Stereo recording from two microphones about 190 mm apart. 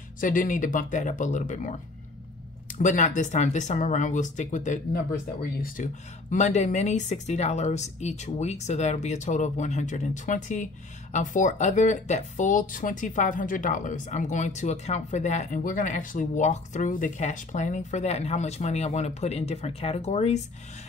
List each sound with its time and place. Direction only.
0.2 s a woman's voice: 45° left (ahead or behind)